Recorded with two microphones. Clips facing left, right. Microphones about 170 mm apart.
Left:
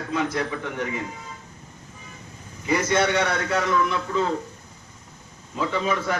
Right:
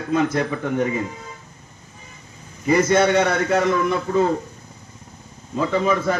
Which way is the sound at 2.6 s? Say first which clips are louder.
Right 5 dB; 50° right (ahead or behind).